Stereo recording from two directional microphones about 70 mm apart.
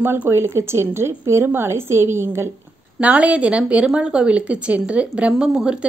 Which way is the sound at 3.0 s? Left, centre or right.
Centre.